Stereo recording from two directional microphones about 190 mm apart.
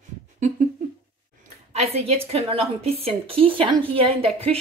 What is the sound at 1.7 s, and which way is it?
A woman's voice, 35° right (ahead or behind).